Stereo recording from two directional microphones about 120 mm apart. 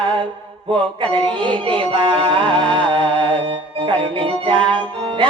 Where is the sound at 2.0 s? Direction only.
50° right (ahead or behind).